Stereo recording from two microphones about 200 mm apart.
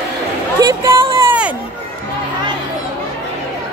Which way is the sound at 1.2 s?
5° right (ahead or behind).